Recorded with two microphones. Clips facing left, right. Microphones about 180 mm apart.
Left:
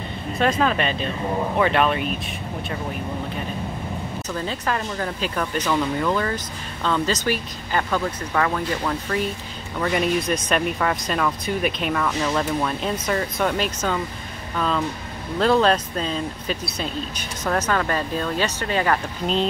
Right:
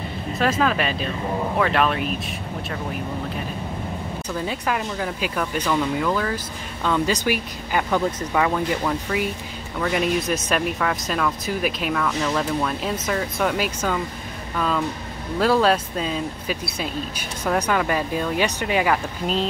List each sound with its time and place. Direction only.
0.4 s speech: centre (ahead or behind)
4.3 s speech: 10° right (ahead or behind)
15.3 s speech: 5° right (ahead or behind)